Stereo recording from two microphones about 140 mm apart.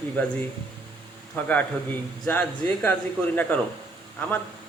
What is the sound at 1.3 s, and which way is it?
Speech, 10° left (ahead or behind).